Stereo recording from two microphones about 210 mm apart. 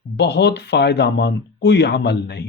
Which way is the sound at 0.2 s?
55° left (ahead or behind).